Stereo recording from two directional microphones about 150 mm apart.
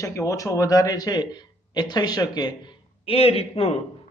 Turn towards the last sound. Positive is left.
turn(degrees=40)  # may be behind; listen again after turning